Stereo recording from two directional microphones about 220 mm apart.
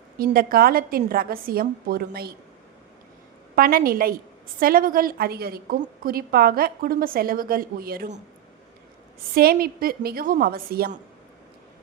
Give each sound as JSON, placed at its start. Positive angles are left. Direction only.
{"t": 0.2, "sound": "a woman's voice", "side_deg": -40}
{"t": 3.5, "sound": "a woman's voice", "side_deg": -40}
{"t": 9.3, "sound": "a woman's voice", "side_deg": -45}